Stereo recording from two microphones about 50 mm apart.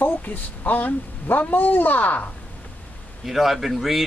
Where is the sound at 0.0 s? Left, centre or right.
Left.